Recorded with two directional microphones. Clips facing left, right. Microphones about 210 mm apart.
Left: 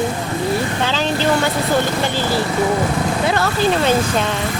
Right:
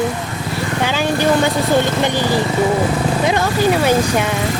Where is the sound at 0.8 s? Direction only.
10° right (ahead or behind).